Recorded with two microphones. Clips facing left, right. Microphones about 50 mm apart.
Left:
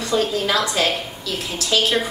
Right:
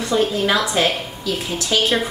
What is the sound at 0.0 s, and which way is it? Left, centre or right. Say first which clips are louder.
Speech: right 2 dB; right.